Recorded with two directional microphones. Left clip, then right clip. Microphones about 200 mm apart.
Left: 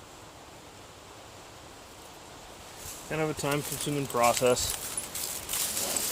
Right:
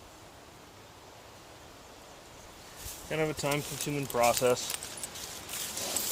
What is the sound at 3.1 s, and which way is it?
Speech, 20° right (ahead or behind).